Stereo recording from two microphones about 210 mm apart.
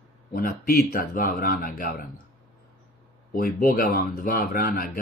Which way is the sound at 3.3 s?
45° left (ahead or behind).